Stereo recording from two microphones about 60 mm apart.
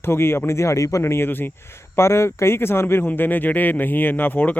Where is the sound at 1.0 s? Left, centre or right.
Left.